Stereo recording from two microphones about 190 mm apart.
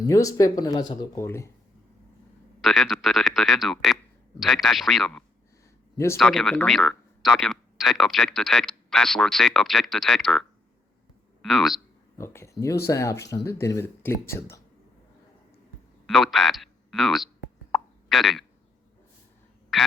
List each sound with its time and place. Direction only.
0.0 s speech: 15° left (ahead or behind)
2.6 s speech: centre (ahead or behind)
11.4 s speech: centre (ahead or behind)
12.1 s speech: 15° left (ahead or behind)
16.0 s speech: centre (ahead or behind)
17.7 s plop: centre (ahead or behind)
19.7 s speech: centre (ahead or behind)